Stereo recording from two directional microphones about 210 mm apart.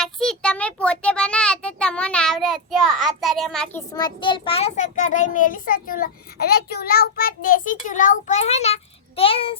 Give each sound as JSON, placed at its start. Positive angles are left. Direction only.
{"t": 0.0, "sound": "a child's voice", "side_deg": 0}